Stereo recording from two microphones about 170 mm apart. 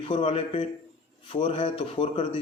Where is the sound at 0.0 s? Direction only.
35° left (ahead or behind).